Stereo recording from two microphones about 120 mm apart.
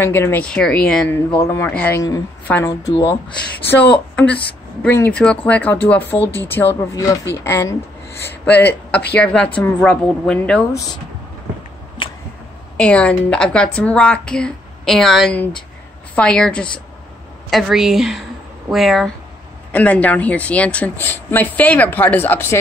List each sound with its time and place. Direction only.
0.0 s speech: 20° left (ahead or behind)
1.4 s speech: 25° left (ahead or behind)
1.7 s speech: 10° left (ahead or behind)
2.0 s speech: 30° left (ahead or behind)
2.5 s speech: 10° left (ahead or behind)
12.7 s a woman's voice: 10° left (ahead or behind)
19.7 s speech: 10° left (ahead or behind)